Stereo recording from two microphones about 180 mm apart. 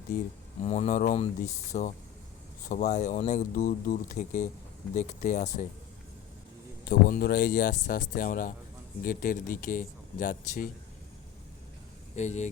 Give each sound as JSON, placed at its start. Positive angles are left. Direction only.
{"t": 0.6, "sound": "speech", "side_deg": 35}
{"t": 6.8, "sound": "speech", "side_deg": 55}
{"t": 12.1, "sound": "speech", "side_deg": 40}